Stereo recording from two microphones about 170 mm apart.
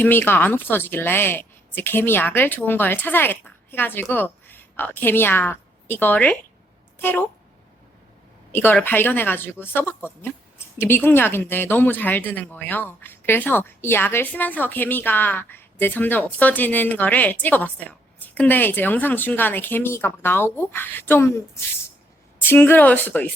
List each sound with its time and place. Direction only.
0.0 s a woman's voice: 10° left (ahead or behind)
8.5 s speech: 10° left (ahead or behind)
22.4 s speech: 15° left (ahead or behind)